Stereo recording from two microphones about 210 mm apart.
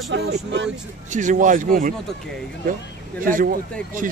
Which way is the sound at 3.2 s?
40° right (ahead or behind).